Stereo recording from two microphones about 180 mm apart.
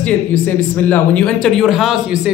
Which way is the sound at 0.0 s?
10° left (ahead or behind).